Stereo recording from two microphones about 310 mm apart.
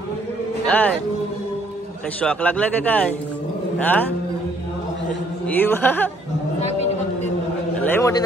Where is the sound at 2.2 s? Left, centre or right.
Centre.